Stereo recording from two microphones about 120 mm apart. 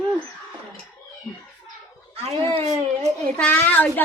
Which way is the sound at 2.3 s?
25° left (ahead or behind).